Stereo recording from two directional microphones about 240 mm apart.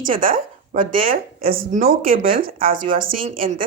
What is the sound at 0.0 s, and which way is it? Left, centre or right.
A woman's voice, right.